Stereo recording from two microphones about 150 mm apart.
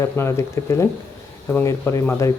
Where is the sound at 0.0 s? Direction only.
20° left (ahead or behind).